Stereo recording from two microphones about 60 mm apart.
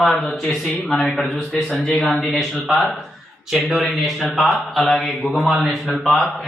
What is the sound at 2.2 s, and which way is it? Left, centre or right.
A man's voice, centre.